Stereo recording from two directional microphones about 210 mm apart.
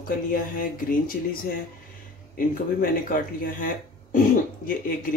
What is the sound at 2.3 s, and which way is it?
Speech, 40° left (ahead or behind).